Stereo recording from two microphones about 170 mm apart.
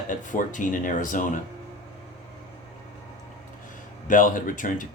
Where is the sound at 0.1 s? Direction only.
50° left (ahead or behind).